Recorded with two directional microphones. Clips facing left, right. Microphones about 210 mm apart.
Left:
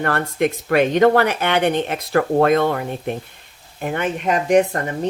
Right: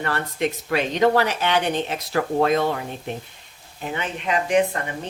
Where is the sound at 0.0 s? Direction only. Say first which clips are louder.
Left 5 dB; 55° left (ahead or behind).